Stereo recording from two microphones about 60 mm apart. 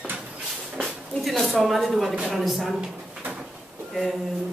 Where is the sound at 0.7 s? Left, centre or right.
Centre.